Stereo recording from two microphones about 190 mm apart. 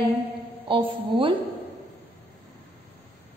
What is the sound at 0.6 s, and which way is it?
Speech, 25° right (ahead or behind).